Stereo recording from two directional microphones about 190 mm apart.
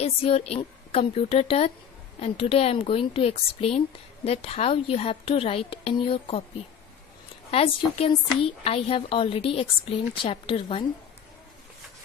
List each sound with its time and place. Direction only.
0.0 s a woman's voice: 30° left (ahead or behind)
7.5 s a woman's voice: 30° left (ahead or behind)